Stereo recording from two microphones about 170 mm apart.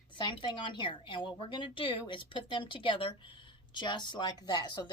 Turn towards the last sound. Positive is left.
turn(degrees=25)  # may be behind; listen again after turning